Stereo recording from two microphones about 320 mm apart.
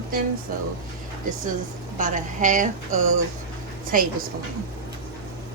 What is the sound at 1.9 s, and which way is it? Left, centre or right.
A woman's voice, right.